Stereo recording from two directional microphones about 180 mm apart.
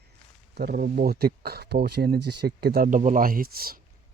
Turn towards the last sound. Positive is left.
turn(degrees=-55)  # may be behind; listen again after turning